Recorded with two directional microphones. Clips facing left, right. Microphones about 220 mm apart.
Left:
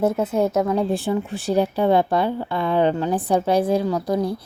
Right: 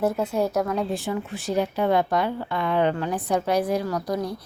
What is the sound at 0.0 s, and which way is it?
A woman's voice, 20° left (ahead or behind).